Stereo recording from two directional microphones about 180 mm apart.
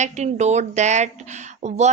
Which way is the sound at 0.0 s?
40° right (ahead or behind).